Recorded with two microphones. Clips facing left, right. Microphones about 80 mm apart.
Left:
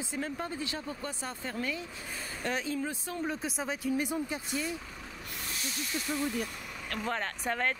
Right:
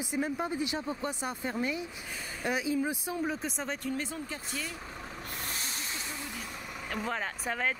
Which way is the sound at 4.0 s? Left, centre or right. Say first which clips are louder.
Left 4 dB; centre.